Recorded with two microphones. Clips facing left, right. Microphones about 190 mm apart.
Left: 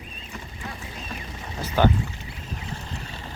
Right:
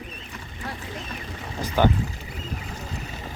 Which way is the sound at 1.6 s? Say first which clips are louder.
Even; 15° right (ahead or behind).